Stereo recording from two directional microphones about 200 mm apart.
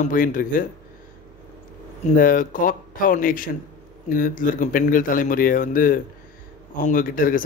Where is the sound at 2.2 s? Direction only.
45° left (ahead or behind).